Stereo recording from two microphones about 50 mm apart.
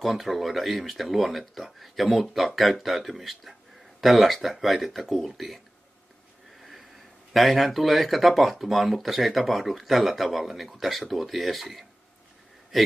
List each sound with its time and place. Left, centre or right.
0.0 s speech: centre
6.6 s sniff: centre
7.3 s a man's voice: centre